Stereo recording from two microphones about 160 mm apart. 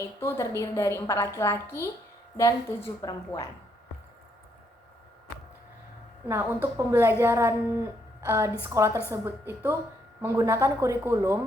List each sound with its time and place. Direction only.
0.0 s a woman's voice: 20° left (ahead or behind)
6.2 s a woman's voice: 15° right (ahead or behind)